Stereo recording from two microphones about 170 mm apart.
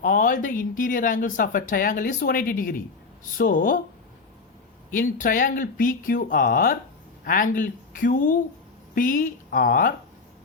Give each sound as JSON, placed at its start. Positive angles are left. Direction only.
{"t": 0.0, "sound": "speech", "side_deg": 55}
{"t": 4.9, "sound": "speech", "side_deg": 50}